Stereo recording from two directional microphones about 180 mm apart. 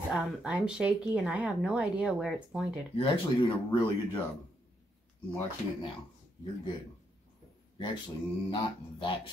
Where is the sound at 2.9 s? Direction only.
25° left (ahead or behind).